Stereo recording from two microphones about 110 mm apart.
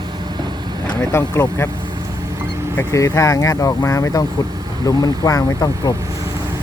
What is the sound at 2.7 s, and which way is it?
Speech, 30° left (ahead or behind).